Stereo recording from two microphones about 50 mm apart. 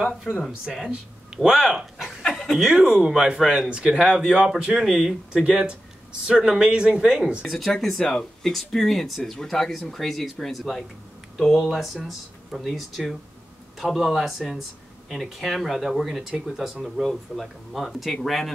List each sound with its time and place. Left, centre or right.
0.0 s speech: centre
0.8 s speech: centre
2.3 s chicken: centre
2.6 s speech: centre
4.7 s speech: centre
5.3 s speech: centre
7.4 s speech: centre